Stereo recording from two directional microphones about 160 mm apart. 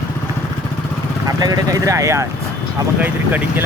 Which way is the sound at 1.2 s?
20° right (ahead or behind).